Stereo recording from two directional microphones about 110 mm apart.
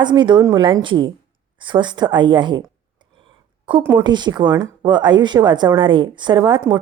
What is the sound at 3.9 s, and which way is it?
A woman's voice, 40° right (ahead or behind).